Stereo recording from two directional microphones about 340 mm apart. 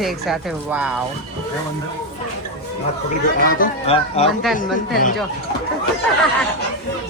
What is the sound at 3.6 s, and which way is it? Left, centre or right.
Speech, centre.